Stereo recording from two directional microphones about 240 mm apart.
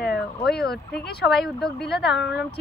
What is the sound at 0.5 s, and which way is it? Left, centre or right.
Speech, centre.